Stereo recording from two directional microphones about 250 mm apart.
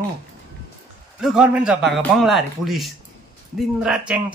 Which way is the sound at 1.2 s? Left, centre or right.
Centre.